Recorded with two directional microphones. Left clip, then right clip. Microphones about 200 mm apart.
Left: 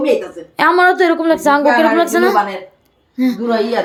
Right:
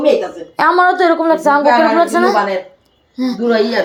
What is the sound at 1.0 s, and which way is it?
Speech, 20° left (ahead or behind).